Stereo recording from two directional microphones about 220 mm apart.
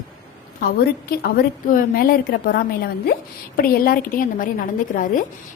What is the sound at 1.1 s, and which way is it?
A woman's voice, 40° left (ahead or behind).